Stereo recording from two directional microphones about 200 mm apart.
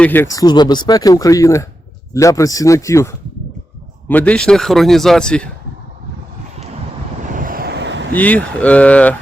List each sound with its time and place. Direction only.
0.0 s speech: 10° left (ahead or behind)
7.3 s vehicle: 45° right (ahead or behind)
8.1 s speech: 10° left (ahead or behind)